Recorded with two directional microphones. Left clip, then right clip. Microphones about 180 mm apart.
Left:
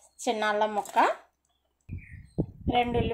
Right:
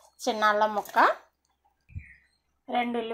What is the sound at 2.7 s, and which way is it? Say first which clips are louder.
Speech: left 2 dB; centre (ahead or behind).